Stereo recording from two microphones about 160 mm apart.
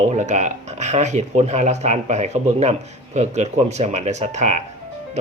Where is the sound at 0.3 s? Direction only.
45° right (ahead or behind).